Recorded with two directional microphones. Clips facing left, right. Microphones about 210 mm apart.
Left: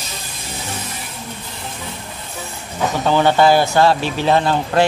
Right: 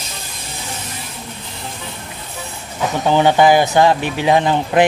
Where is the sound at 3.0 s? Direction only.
15° right (ahead or behind).